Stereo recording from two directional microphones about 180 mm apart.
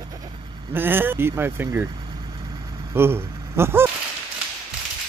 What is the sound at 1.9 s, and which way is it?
Vehicle, 25° right (ahead or behind).